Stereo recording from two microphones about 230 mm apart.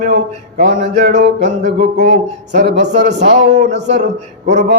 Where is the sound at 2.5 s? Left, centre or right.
Right.